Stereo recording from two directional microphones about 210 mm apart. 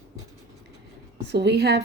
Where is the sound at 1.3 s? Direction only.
55° right (ahead or behind).